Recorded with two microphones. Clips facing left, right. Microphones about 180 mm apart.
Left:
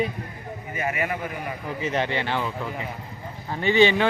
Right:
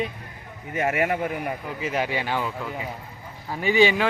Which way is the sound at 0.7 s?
70° right (ahead or behind).